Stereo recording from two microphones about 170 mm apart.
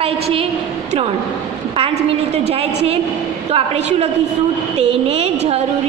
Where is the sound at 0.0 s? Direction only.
35° right (ahead or behind).